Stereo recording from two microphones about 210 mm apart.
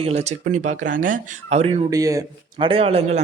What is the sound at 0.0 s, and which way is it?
Speech, 30° right (ahead or behind).